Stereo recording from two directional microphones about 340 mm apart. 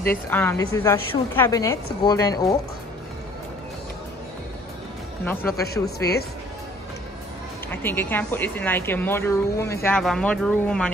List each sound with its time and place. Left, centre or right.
0.1 s a woman's voice: centre
5.2 s a woman's voice: centre
5.9 s speech: left
7.7 s a woman's voice: centre